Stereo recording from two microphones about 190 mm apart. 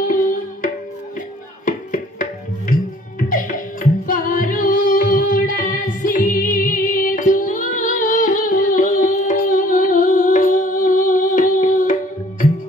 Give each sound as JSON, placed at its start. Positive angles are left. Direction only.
{"t": 0.0, "sound": "music", "side_deg": 45}
{"t": 1.7, "sound": "a sound", "side_deg": 45}
{"t": 3.3, "sound": "music", "side_deg": 45}